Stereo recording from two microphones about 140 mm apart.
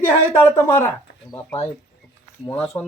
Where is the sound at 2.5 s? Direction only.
10° left (ahead or behind).